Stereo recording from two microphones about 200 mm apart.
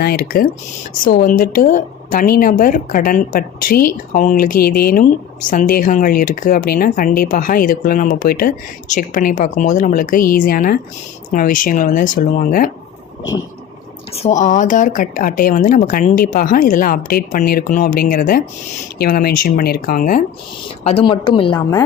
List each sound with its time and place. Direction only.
0.0 s a woman's voice: 50° left (ahead or behind)
14.1 s a woman's voice: 35° left (ahead or behind)
20.8 s a woman's voice: 25° left (ahead or behind)